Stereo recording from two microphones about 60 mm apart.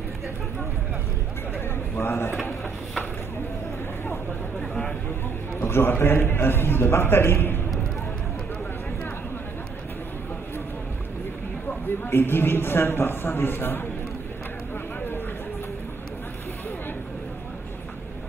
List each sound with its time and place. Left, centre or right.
2.0 s a man's voice: left
5.6 s a man's voice: left
12.1 s a man's voice: left